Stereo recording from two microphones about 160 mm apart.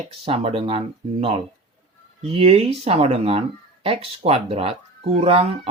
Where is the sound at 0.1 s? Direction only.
35° right (ahead or behind).